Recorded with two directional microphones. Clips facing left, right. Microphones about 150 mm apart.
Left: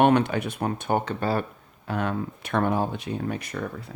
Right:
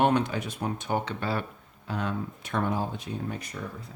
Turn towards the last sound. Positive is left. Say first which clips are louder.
# left 5 dB
turn(degrees=70)  # may be behind; listen again after turning